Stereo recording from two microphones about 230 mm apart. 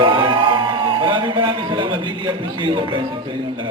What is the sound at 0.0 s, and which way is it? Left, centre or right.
A man's voice, right.